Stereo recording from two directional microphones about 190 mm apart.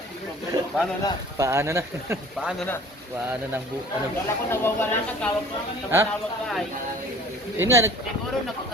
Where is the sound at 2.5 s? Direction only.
10° left (ahead or behind).